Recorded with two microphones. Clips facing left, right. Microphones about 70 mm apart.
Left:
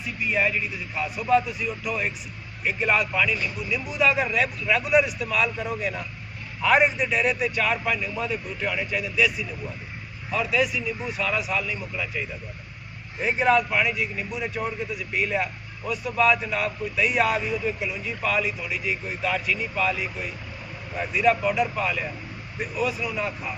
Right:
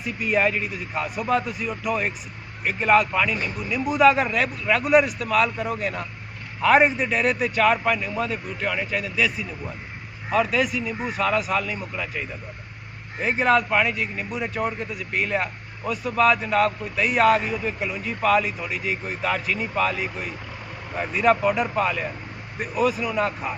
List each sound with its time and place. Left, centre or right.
0.3 s a man's voice: right
13.2 s a man's voice: right